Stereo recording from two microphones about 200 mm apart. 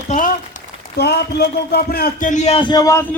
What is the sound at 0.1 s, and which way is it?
A man's voice, 40° left (ahead or behind).